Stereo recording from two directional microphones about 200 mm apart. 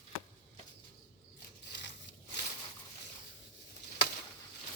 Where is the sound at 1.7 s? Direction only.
60° left (ahead or behind).